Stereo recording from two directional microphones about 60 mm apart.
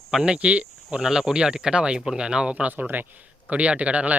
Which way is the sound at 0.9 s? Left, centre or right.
Centre.